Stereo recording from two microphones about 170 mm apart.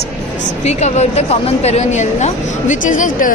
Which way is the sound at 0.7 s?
40° left (ahead or behind).